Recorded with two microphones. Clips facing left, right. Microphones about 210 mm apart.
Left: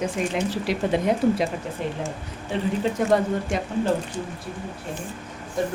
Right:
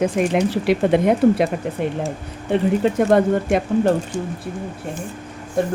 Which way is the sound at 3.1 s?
60° right (ahead or behind).